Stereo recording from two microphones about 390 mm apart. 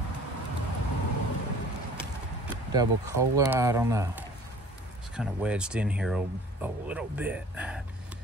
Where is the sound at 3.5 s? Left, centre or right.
Centre.